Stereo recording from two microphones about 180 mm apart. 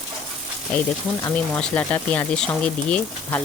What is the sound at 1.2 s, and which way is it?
Speech, 10° left (ahead or behind).